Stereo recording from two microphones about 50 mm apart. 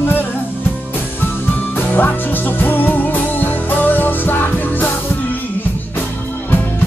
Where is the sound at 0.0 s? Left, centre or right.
Left.